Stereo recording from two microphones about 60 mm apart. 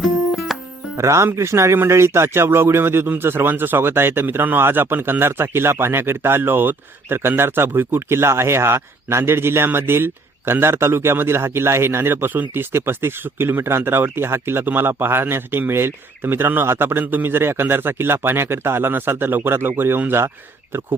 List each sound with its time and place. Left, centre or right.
0.0 s music: centre
0.9 s speech: right